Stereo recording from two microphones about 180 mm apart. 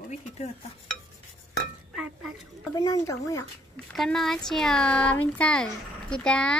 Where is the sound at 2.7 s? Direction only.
20° left (ahead or behind).